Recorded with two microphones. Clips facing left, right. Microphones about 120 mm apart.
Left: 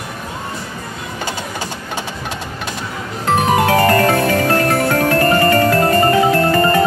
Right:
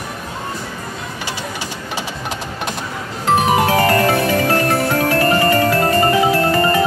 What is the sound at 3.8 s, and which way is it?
Music, 35° left (ahead or behind).